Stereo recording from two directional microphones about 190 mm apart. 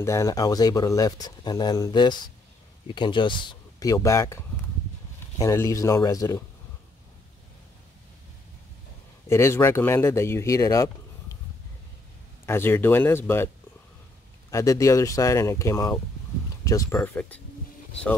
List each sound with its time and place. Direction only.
0.0 s speech: 15° left (ahead or behind)
9.3 s speech: 15° left (ahead or behind)
12.4 s speech: 10° left (ahead or behind)
14.5 s speech: 15° left (ahead or behind)